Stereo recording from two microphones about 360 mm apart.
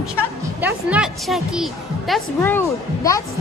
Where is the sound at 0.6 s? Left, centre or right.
Centre.